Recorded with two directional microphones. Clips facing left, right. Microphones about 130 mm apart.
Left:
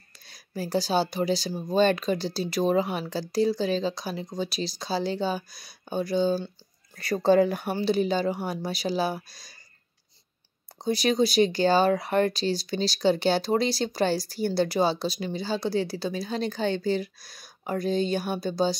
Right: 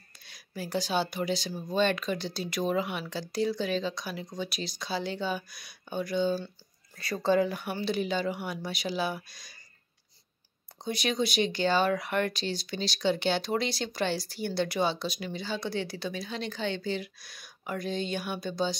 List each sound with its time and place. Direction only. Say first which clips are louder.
0.2 s speech: left 5 dB; 35° left (ahead or behind)
7.4 s speech: left 5 dB; 45° left (ahead or behind)
7.7 s speech: left 6 dB; 35° left (ahead or behind)
10.8 s speech: left 6 dB; 35° left (ahead or behind)